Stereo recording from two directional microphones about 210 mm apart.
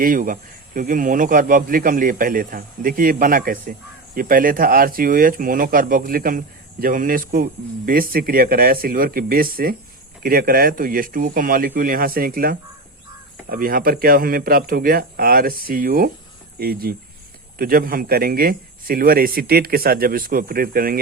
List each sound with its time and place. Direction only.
0.0 s speech: 40° right (ahead or behind)